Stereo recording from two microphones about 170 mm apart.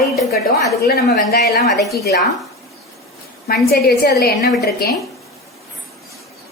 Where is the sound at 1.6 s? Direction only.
Centre (ahead or behind).